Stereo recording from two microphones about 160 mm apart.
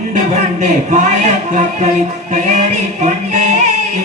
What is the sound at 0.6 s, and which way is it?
Music, 45° right (ahead or behind).